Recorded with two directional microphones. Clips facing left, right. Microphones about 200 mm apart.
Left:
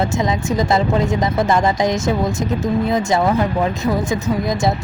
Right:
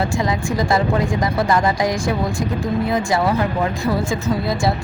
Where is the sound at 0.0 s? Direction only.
20° left (ahead or behind).